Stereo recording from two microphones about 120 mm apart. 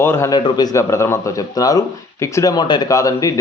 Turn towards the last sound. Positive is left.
turn(degrees=30)  # may be behind; listen again after turning